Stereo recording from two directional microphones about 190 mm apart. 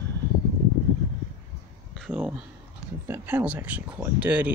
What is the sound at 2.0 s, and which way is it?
Speech, 5° right (ahead or behind).